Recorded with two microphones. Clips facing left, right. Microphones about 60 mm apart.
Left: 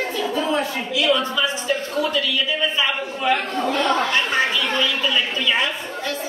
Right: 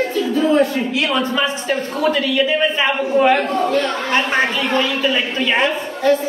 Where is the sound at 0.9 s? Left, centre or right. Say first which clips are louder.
Right 1 dB; right.